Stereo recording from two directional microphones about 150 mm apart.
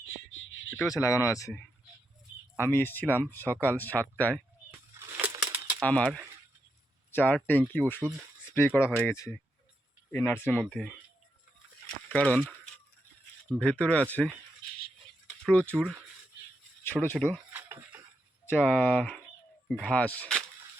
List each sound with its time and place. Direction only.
0.8 s speech: 20° left (ahead or behind)
2.6 s speech: 15° left (ahead or behind)
4.9 s a sound: 15° right (ahead or behind)
5.8 s speech: 10° left (ahead or behind)
12.1 s speech: 10° left (ahead or behind)
15.4 s speech: 10° left (ahead or behind)
15.7 s speech: 10° right (ahead or behind)
17.5 s a sound: 15° right (ahead or behind)
18.5 s speech: 5° left (ahead or behind)